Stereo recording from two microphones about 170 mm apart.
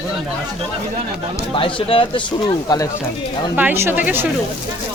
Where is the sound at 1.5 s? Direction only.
30° left (ahead or behind).